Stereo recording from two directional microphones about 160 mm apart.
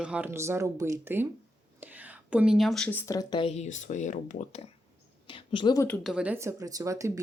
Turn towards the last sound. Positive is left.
turn(degrees=-20)  # may be behind; listen again after turning